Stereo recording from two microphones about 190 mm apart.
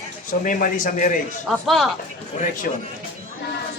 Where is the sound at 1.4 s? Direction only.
Centre (ahead or behind).